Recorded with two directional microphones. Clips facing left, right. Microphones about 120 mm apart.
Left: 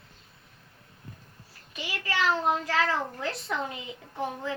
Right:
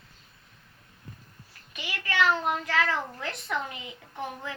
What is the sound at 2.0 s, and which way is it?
A child's voice, 30° left (ahead or behind).